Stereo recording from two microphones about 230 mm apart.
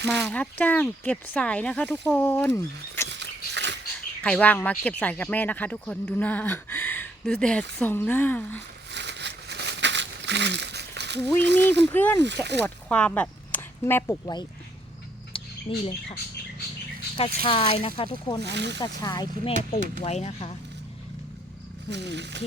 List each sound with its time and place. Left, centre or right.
0.1 s speech: centre
3.1 s dog: right
4.2 s speech: centre
8.9 s crumpling: right
11.4 s speech: right
11.9 s speech: centre
12.2 s speech: right
12.6 s speech: centre
15.3 s rodents: left
17.4 s speech: left
18.4 s speech: right
18.8 s speech: centre
19.7 s speech: left
21.8 s speech: right